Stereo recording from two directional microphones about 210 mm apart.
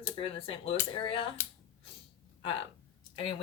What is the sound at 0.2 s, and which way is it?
Speech, 25° left (ahead or behind).